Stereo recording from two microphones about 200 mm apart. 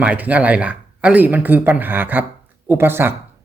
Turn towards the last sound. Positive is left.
turn(degrees=-10)  # may be behind; listen again after turning